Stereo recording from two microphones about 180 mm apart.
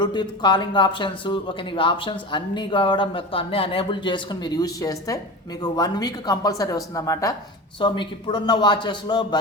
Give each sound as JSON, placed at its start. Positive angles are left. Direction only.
{"t": 0.0, "sound": "speech", "side_deg": 25}